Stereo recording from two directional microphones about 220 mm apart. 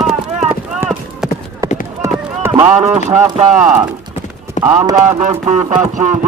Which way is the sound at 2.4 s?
10° right (ahead or behind).